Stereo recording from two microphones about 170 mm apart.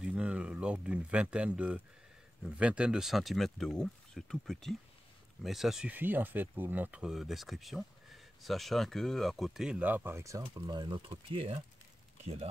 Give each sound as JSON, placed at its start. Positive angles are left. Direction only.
{"t": 0.0, "sound": "speech", "side_deg": -5}